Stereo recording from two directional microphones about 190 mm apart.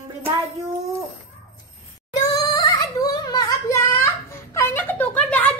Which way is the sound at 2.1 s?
20° left (ahead or behind).